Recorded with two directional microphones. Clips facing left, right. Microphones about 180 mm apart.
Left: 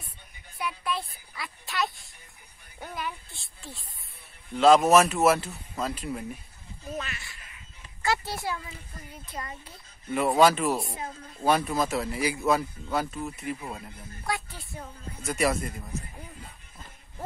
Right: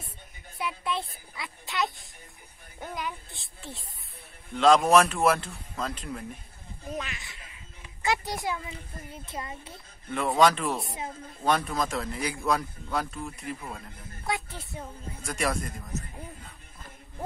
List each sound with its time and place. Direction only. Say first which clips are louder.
0.6 s a sound: even; 25° right (ahead or behind)
2.8 s speech: even; 15° right (ahead or behind)
4.6 s speech: left 1 dB; 5° left (ahead or behind)
6.9 s speech: even; 15° right (ahead or behind)
10.0 s speech: left 2 dB; 5° left (ahead or behind)
14.2 s a woman's voice: right 1 dB; 20° right (ahead or behind)
15.2 s speech: left 3 dB; 5° left (ahead or behind)